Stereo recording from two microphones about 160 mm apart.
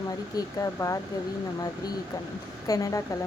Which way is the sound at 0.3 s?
20° left (ahead or behind).